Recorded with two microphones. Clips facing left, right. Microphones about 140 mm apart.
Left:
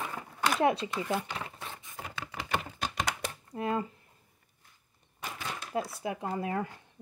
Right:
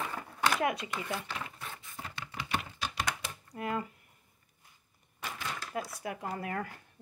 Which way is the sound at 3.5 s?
25° left (ahead or behind).